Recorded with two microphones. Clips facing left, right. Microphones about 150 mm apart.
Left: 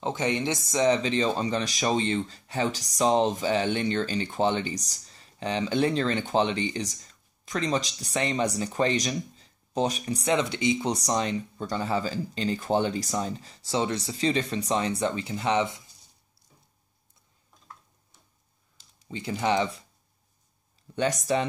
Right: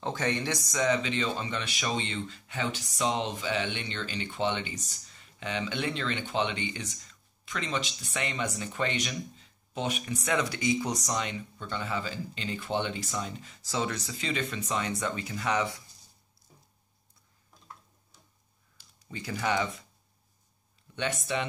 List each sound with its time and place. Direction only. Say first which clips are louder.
0.0 s speech: left 3 dB; 20° left (ahead or behind)
18.8 s speech: left 4 dB; 25° left (ahead or behind)
20.9 s speech: left 6 dB; 40° left (ahead or behind)